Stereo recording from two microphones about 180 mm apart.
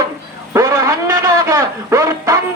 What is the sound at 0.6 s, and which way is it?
Music, 15° right (ahead or behind).